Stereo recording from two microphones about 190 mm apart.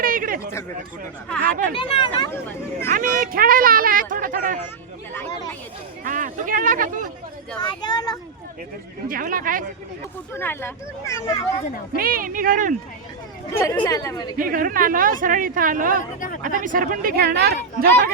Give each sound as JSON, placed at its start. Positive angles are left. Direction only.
{"t": 0.0, "sound": "a sound", "side_deg": -45}
{"t": 1.4, "sound": "speech", "side_deg": -45}
{"t": 1.8, "sound": "speech", "side_deg": 25}
{"t": 2.9, "sound": "speech", "side_deg": -45}
{"t": 6.1, "sound": "speech", "side_deg": -45}
{"t": 7.6, "sound": "speech", "side_deg": 20}
{"t": 9.0, "sound": "speech", "side_deg": -50}
{"t": 10.3, "sound": "speech", "side_deg": 10}
{"t": 11.9, "sound": "speech", "side_deg": -50}
{"t": 13.5, "sound": "speech", "side_deg": 15}
{"t": 14.3, "sound": "speech", "side_deg": -45}